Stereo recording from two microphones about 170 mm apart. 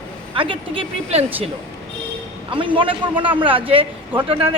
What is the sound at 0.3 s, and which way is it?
Speech, 30° right (ahead or behind).